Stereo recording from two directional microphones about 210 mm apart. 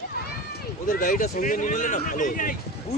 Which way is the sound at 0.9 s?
40° left (ahead or behind).